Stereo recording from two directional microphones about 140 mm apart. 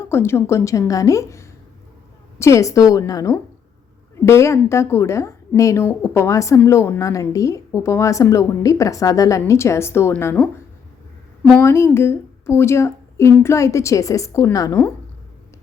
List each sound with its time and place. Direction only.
0.0 s a woman's voice: 15° left (ahead or behind)
11.6 s a woman's voice: 20° left (ahead or behind)